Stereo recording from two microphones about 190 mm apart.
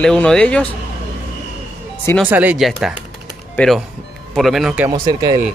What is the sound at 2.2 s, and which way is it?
Speech, 10° right (ahead or behind).